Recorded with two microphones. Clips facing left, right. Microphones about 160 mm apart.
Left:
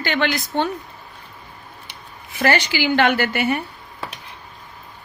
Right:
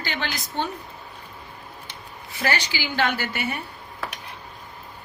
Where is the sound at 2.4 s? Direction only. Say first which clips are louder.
Left 7 dB; 65° left (ahead or behind).